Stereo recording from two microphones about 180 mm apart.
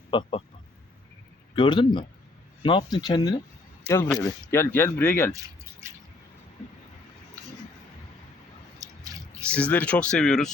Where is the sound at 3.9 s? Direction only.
15° left (ahead or behind).